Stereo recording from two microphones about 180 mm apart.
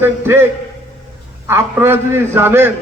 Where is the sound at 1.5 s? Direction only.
10° right (ahead or behind).